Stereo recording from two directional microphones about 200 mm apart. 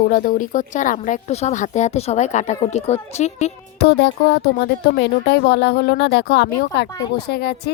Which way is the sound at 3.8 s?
55° left (ahead or behind).